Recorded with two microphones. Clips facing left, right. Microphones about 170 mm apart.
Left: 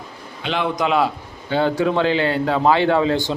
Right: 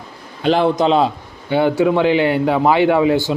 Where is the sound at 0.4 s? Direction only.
40° right (ahead or behind).